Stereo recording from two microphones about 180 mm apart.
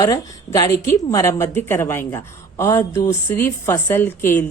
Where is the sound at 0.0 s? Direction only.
20° left (ahead or behind).